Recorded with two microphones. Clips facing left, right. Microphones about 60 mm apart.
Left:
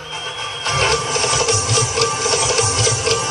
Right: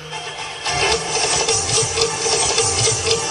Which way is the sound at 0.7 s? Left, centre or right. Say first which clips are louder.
Left 2 dB; left.